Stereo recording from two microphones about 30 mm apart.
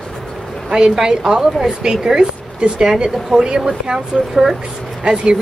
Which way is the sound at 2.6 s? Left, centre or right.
Right.